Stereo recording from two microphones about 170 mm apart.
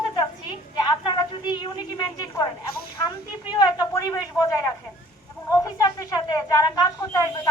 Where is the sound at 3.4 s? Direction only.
20° left (ahead or behind).